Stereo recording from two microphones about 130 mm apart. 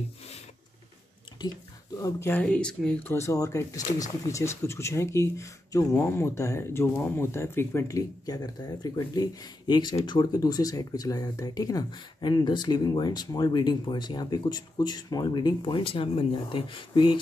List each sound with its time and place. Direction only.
2.0 s speech: 25° left (ahead or behind)
2.4 s speech: 5° left (ahead or behind)
3.1 s speech: 20° left (ahead or behind); by 17.2 s 40° left (ahead or behind)